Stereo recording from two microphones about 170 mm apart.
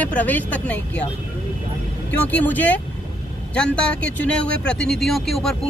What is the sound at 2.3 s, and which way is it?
Speech, 10° left (ahead or behind).